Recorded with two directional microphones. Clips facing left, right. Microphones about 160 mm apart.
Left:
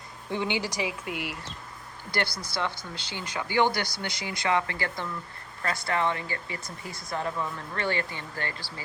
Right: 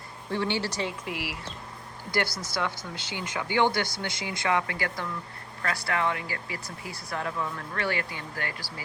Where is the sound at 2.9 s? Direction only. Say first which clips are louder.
Right 1 dB; 15° right (ahead or behind).